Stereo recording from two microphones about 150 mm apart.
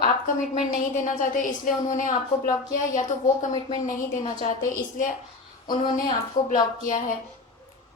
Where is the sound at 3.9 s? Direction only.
65° left (ahead or behind).